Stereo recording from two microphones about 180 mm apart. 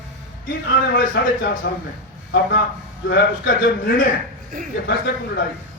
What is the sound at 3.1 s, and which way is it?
Speech, 60° left (ahead or behind).